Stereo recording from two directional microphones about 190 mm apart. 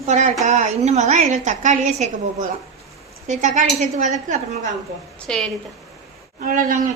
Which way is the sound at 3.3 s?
40° right (ahead or behind).